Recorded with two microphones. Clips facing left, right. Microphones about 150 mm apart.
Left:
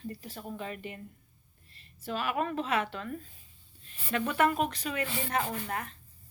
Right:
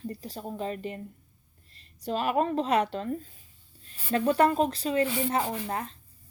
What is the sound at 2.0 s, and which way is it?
Speech, 40° right (ahead or behind).